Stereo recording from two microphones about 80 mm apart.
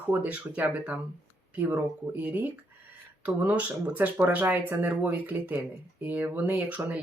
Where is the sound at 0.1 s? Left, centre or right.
Centre.